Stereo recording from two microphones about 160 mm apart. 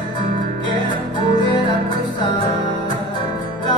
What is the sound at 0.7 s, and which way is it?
Music, 30° left (ahead or behind).